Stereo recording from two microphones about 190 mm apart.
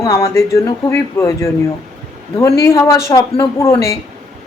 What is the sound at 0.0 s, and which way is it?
Speech, 15° left (ahead or behind).